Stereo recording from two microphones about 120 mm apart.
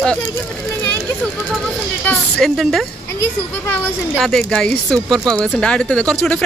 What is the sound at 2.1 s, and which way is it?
Speech, 5° left (ahead or behind).